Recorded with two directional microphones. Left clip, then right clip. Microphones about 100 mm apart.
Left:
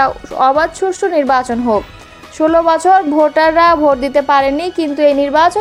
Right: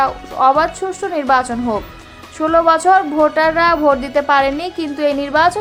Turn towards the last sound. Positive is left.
turn(degrees=40)  # may be behind; listen again after turning